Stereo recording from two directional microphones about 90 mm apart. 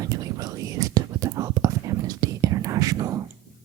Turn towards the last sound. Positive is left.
turn(degrees=-40)  # may be behind; listen again after turning